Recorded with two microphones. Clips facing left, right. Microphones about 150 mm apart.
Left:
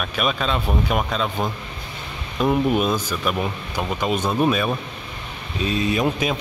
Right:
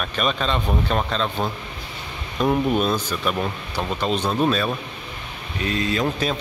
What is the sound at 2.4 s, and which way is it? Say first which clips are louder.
Speech: left 1 dB; 5° left (ahead or behind).